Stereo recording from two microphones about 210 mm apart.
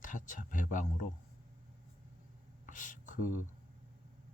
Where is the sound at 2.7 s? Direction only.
40° left (ahead or behind).